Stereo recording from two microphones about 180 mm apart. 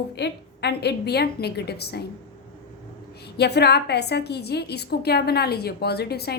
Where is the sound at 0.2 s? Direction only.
65° left (ahead or behind).